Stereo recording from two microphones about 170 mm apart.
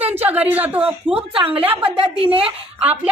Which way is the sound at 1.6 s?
10° right (ahead or behind).